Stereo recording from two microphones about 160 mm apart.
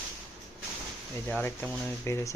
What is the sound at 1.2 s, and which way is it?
Speech, 10° left (ahead or behind).